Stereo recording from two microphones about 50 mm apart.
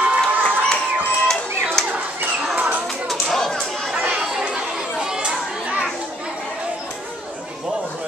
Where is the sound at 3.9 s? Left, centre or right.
Right.